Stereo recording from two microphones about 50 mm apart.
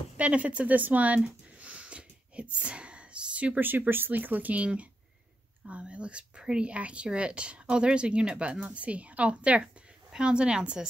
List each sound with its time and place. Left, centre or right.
0.2 s speech: right
1.6 s a sound: right
3.5 s a woman's voice: right; by 10.9 s centre